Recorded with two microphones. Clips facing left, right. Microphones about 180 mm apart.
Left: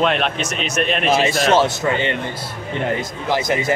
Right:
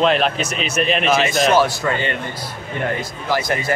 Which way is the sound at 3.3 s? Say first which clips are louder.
Left 1 dB; 20° left (ahead or behind).